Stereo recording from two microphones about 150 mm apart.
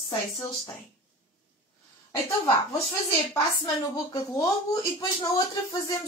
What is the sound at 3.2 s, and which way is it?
Speech, 25° left (ahead or behind).